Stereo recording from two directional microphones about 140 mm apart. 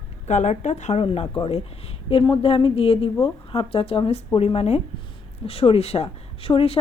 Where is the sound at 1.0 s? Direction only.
40° left (ahead or behind).